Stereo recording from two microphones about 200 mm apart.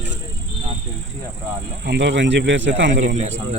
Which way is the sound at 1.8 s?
60° right (ahead or behind).